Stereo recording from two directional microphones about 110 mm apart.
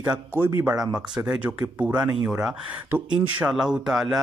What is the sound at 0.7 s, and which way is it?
Speech, 5° right (ahead or behind).